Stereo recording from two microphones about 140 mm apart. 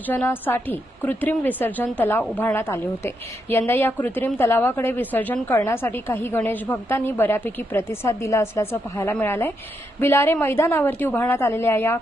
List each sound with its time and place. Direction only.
0.1 s a woman's voice: 15° left (ahead or behind)